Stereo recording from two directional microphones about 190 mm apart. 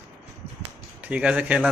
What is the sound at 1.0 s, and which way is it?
Speech, 5° right (ahead or behind).